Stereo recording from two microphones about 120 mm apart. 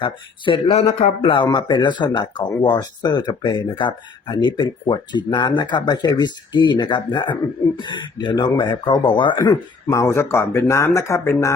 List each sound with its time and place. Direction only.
0.0 s speech: 45° left (ahead or behind)
1.5 s speech: 40° left (ahead or behind)
9.8 s speech: 25° left (ahead or behind)